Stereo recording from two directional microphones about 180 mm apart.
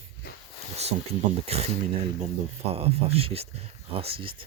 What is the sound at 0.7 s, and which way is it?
Speech, 35° right (ahead or behind).